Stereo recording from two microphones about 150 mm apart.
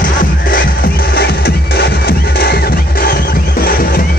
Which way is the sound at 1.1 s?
90° left.